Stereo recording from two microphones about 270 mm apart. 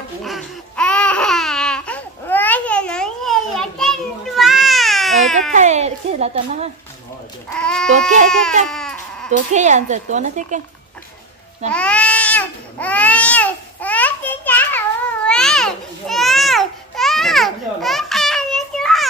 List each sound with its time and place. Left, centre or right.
0.2 s babbling: centre
5.5 s a sound: right
7.4 s speech: centre
8.6 s baby cry: centre
9.5 s speech: right
11.7 s babbling: centre